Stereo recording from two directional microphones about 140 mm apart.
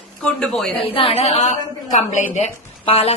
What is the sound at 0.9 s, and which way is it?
A woman's voice, 40° left (ahead or behind).